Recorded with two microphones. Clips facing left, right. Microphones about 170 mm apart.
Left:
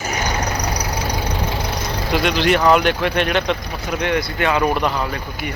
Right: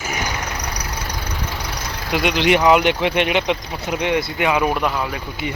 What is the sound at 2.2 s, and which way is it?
Speech, 15° right (ahead or behind).